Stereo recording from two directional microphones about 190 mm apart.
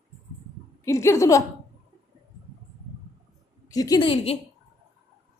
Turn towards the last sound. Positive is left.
turn(degrees=30)  # may be behind; listen again after turning